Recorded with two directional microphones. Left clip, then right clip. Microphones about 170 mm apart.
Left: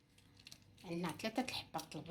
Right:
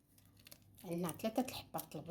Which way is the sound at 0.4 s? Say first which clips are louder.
Right 2 dB; 25° right (ahead or behind).